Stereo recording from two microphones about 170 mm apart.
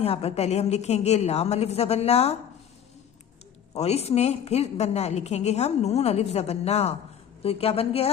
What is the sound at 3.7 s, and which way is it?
A woman's voice, 35° left (ahead or behind).